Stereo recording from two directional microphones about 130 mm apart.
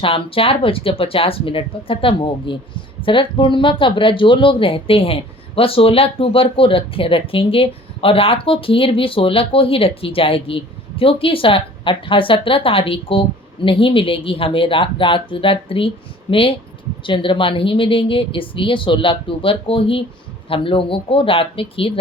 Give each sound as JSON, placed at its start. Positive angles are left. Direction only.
{"t": 0.0, "sound": "speech", "side_deg": 45}